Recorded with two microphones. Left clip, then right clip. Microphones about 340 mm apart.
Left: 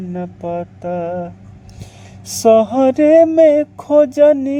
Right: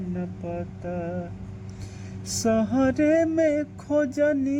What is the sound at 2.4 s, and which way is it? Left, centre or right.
Mantra, left.